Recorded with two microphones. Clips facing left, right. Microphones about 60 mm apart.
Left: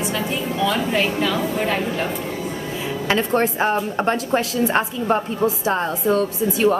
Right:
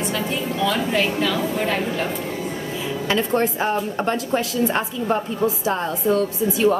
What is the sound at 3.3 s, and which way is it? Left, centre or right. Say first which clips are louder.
A woman's voice: left 2 dB; left.